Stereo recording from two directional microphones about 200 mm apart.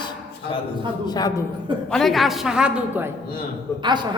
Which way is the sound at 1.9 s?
Centre (ahead or behind).